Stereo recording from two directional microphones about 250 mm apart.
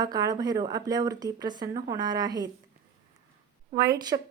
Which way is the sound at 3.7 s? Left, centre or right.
Centre.